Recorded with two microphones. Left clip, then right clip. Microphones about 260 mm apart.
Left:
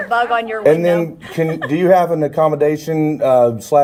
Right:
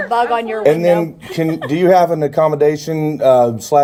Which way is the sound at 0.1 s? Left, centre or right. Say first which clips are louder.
Even; right.